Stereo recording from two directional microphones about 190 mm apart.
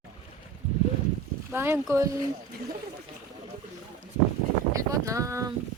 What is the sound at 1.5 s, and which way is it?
Speech, 10° right (ahead or behind).